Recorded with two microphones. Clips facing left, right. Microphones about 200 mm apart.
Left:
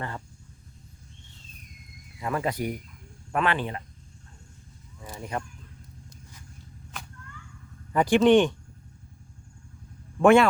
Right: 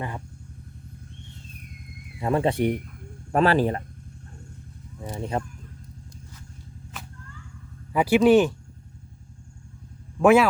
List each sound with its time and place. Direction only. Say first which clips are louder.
2.1 s speech: right 6 dB; 30° right (ahead or behind)
5.0 s speech: right 5 dB; 25° right (ahead or behind)
6.9 s whip: even; centre (ahead or behind)
7.9 s speech: right 1 dB; 5° right (ahead or behind)
10.2 s speech: right 1 dB; 5° right (ahead or behind)